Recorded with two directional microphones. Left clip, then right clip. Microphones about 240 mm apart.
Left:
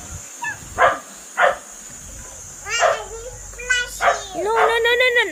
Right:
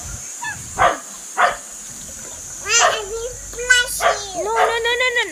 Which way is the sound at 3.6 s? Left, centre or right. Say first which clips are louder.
Right 6 dB; right.